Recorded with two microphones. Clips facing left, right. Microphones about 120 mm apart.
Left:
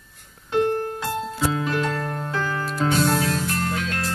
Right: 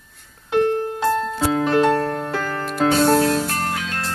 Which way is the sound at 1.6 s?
65° right (ahead or behind).